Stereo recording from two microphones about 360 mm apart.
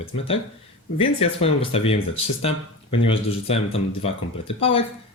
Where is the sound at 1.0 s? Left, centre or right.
Centre.